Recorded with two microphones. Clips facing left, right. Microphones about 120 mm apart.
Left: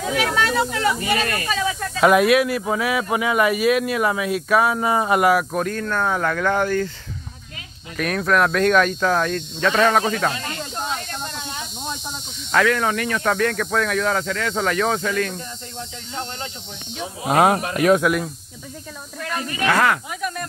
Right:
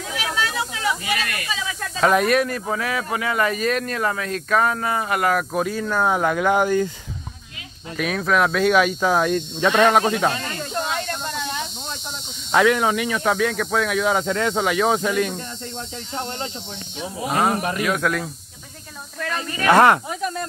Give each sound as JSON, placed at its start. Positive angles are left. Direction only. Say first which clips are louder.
{"t": 0.2, "sound": "snake", "louder": "left 4 dB", "side_deg": 55}
{"t": 1.0, "sound": "speech", "louder": "left 4 dB", "side_deg": 35}
{"t": 1.8, "sound": "speech", "louder": "left 2 dB", "side_deg": 5}
{"t": 5.3, "sound": "speech", "louder": "left 2 dB", "side_deg": 0}
{"t": 8.0, "sound": "speech", "louder": "left 1 dB", "side_deg": 0}
{"t": 9.9, "sound": "speech", "louder": "right 2 dB", "side_deg": -20}
{"t": 12.5, "sound": "speech", "louder": "right 2 dB", "side_deg": -15}
{"t": 14.2, "sound": "speech", "louder": "right 3 dB", "side_deg": -25}
{"t": 14.5, "sound": "speech", "louder": "even", "side_deg": -10}
{"t": 17.3, "sound": "speech", "louder": "left 4 dB", "side_deg": 55}
{"t": 18.1, "sound": "speech", "louder": "left 3 dB", "side_deg": 10}
{"t": 19.7, "sound": "speech", "louder": "right 6 dB", "side_deg": -30}